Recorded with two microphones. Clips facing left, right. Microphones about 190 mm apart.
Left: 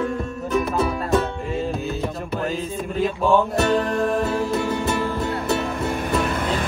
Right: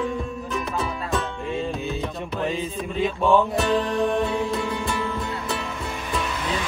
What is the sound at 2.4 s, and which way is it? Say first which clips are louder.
Music: right 1 dB; centre (ahead or behind).